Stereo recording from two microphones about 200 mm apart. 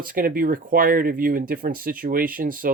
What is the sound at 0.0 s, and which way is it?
Speech, 45° right (ahead or behind).